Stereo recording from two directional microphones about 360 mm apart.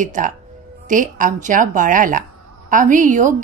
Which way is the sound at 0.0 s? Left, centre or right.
Right.